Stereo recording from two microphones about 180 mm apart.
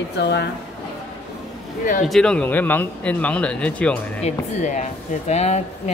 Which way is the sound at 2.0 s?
5° left (ahead or behind).